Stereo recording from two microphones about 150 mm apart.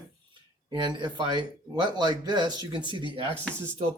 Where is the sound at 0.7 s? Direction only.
30° right (ahead or behind).